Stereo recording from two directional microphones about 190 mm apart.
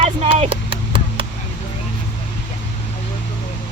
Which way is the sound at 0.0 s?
35° right (ahead or behind).